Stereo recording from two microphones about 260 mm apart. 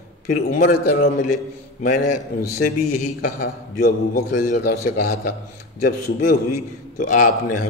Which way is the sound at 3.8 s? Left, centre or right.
Left.